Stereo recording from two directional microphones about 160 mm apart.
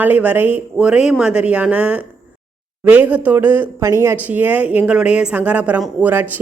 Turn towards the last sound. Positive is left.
turn(degrees=-10)  # may be behind; listen again after turning